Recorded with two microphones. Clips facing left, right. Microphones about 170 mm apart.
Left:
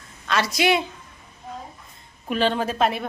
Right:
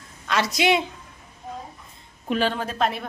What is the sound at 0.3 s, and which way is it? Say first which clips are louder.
Speech: even; 20° right (ahead or behind).